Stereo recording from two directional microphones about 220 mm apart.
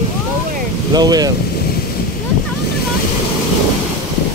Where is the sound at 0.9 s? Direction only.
15° right (ahead or behind).